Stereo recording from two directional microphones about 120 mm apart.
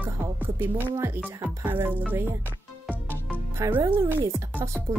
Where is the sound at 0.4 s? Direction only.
15° right (ahead or behind).